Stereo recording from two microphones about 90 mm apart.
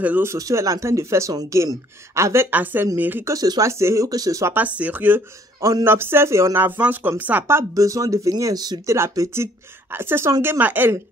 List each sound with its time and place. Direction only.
0.0 s speech: 20° right (ahead or behind)
0.3 s speech: 35° right (ahead or behind)
2.5 s speech: 20° right (ahead or behind)
3.3 s speech: 40° right (ahead or behind)
4.6 s speech: 15° right (ahead or behind); by 8.9 s 45° right (ahead or behind)
8.9 s speech: 35° right (ahead or behind)